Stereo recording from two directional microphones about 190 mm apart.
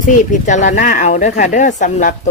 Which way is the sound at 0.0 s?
40° left (ahead or behind).